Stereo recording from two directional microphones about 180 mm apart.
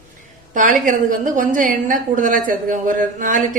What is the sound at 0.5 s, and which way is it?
A woman's voice, 45° right (ahead or behind).